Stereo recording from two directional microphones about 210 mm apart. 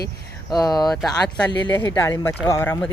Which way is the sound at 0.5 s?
20° left (ahead or behind).